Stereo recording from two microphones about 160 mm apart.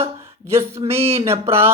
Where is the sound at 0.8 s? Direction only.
40° right (ahead or behind).